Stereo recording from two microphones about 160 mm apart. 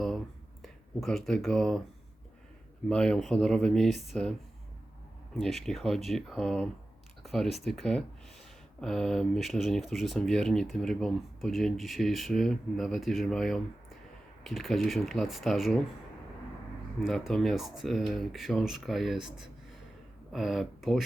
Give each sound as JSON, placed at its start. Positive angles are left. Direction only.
{"t": 0.6, "sound": "speech", "side_deg": 0}
{"t": 2.9, "sound": "speech", "side_deg": 5}
{"t": 17.0, "sound": "speech", "side_deg": 0}